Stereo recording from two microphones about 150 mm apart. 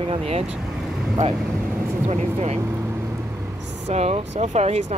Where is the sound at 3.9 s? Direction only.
45° right (ahead or behind).